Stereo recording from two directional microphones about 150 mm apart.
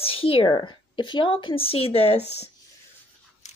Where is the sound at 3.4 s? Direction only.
50° left (ahead or behind).